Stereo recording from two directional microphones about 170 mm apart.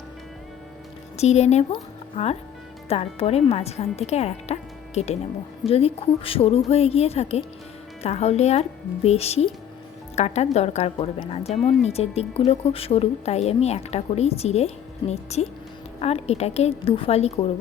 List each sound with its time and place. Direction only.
1.1 s a woman's voice: 40° left (ahead or behind)
1.7 s music: 35° left (ahead or behind)
2.9 s a woman's voice: 35° left (ahead or behind)